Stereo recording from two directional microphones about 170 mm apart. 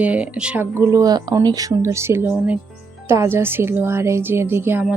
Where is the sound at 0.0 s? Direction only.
10° right (ahead or behind).